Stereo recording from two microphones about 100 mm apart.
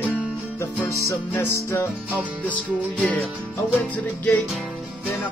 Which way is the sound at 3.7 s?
15° left (ahead or behind).